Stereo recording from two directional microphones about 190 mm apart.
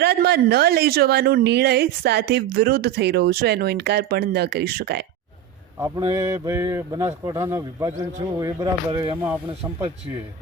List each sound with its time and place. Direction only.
0.0 s speech: 60° right (ahead or behind)
6.1 s mantra: 15° right (ahead or behind)